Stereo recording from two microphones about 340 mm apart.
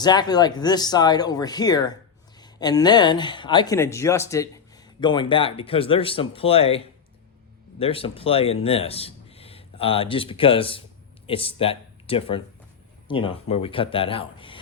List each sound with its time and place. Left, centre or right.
0.0 s speech: centre